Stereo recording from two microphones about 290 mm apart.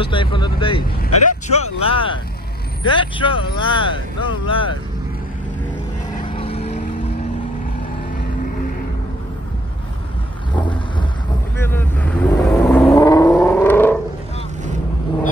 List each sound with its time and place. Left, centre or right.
0.0 s speech: centre
6.2 s vehicle: centre
11.5 s vehicle: centre